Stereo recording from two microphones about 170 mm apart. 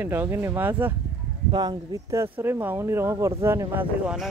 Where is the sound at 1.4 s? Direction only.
25° right (ahead or behind).